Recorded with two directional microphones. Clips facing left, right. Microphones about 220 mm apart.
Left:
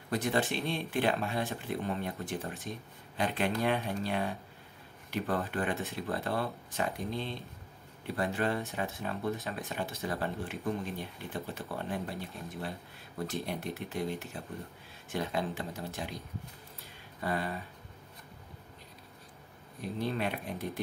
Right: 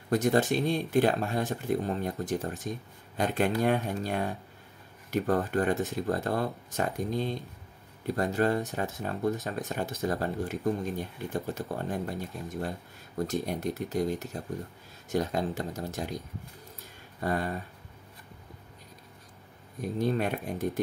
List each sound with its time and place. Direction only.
0.1 s speech: 45° right (ahead or behind)
17.2 s speech: 45° right (ahead or behind)
19.8 s speech: 45° right (ahead or behind)